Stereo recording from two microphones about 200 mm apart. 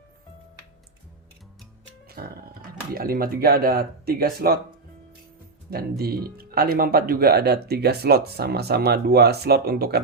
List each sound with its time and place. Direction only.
2.0 s music: 50° right (ahead or behind)
2.9 s speech: 45° right (ahead or behind)
5.7 s speech: 50° right (ahead or behind)